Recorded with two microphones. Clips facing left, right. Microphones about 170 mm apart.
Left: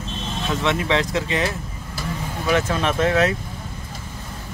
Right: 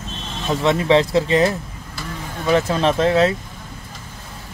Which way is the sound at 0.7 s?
30° right (ahead or behind).